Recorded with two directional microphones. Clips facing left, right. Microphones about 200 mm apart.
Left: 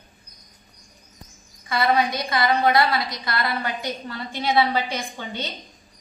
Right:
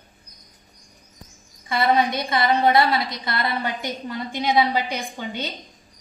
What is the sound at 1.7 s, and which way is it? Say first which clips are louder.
A woman's voice: right 1 dB; 25° right (ahead or behind).